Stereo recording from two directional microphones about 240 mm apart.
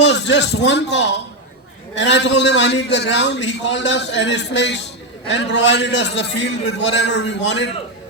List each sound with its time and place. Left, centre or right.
0.0 s a man's voice: left